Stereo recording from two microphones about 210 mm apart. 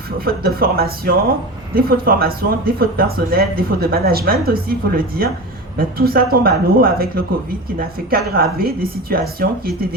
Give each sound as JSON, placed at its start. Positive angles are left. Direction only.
{"t": 0.3, "sound": "speech", "side_deg": -45}